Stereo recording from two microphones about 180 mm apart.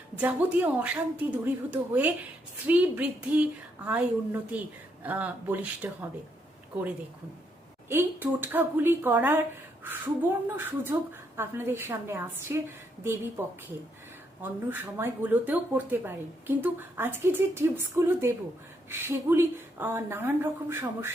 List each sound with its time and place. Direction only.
0.2 s speech: 10° right (ahead or behind)
7.9 s speech: 10° right (ahead or behind)
14.4 s speech: 10° right (ahead or behind)